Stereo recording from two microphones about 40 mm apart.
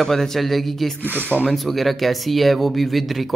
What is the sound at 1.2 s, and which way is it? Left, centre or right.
Speech, right.